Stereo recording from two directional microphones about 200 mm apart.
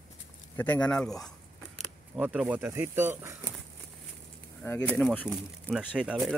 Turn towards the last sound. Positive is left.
turn(degrees=0)  # may be behind; listen again after turning